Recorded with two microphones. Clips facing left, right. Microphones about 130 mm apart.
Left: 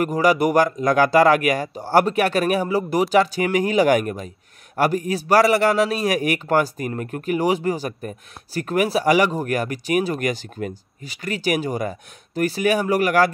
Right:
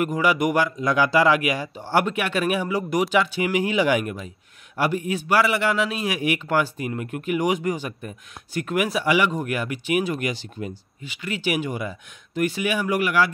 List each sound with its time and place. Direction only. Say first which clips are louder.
0.0 s a man's voice: left 3 dB; 40° left (ahead or behind)